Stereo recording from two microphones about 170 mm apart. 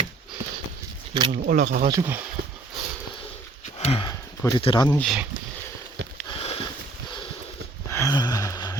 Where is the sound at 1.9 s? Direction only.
15° right (ahead or behind).